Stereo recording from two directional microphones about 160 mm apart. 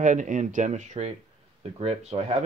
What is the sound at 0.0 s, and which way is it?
Speech, 50° right (ahead or behind).